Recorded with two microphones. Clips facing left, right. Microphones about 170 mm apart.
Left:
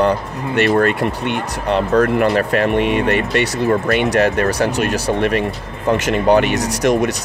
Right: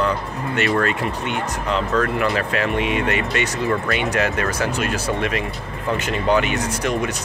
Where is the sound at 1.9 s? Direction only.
40° left (ahead or behind).